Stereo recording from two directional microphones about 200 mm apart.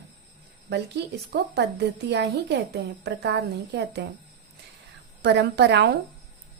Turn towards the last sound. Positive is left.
turn(degrees=-55)  # may be behind; listen again after turning